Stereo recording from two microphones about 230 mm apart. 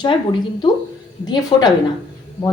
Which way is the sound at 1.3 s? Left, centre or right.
Centre.